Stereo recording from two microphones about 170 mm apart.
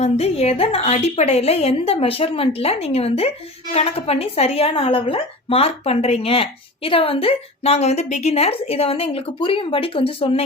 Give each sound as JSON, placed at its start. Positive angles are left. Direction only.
{"t": 0.0, "sound": "a woman's voice", "side_deg": 40}